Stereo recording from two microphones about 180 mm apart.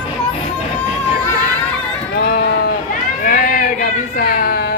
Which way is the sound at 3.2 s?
50° left (ahead or behind).